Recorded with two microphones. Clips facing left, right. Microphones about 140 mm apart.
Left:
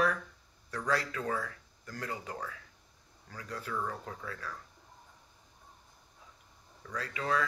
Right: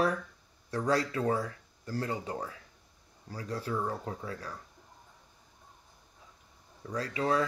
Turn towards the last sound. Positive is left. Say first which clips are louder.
# right 4 dB
turn(degrees=-35)  # may be behind; listen again after turning